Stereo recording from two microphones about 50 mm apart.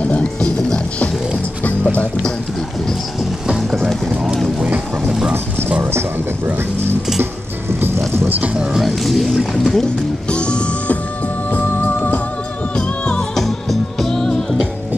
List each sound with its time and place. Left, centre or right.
0.2 s speech: centre
1.6 s music: left
3.5 s music: centre
6.4 s speech: right
8.8 s speech: centre
10.3 s music: left
11.5 s music: left
12.7 s music: centre
13.4 s music: centre